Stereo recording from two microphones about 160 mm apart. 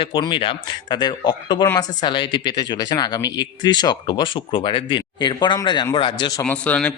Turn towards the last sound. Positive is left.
turn(degrees=10)  # may be behind; listen again after turning